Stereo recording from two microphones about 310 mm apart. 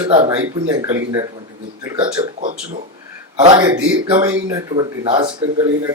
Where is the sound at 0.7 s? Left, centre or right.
Centre.